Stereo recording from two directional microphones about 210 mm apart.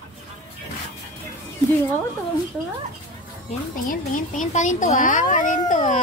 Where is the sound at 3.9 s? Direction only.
40° left (ahead or behind).